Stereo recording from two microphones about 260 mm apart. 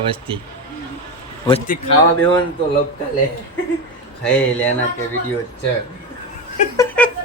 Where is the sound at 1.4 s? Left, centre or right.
Left.